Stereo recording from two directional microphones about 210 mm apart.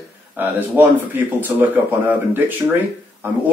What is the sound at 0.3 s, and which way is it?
Speech, 10° right (ahead or behind).